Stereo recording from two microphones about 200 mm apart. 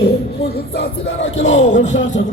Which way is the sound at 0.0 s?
55° left (ahead or behind).